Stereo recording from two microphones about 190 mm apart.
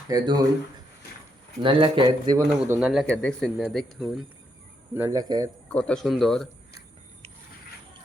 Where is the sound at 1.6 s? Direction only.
25° right (ahead or behind).